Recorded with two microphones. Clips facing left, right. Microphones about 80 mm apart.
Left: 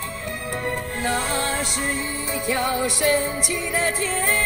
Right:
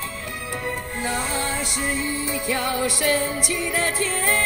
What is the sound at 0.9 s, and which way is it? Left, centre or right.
Music, left.